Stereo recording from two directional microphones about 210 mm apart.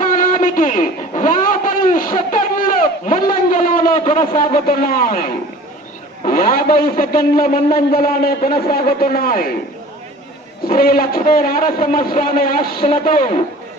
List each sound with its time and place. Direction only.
0.0 s a man's voice: 40° left (ahead or behind)
2.3 s a sound: 40° left (ahead or behind)
4.0 s a man's voice: 40° left (ahead or behind)
10.7 s a man's voice: 45° left (ahead or behind)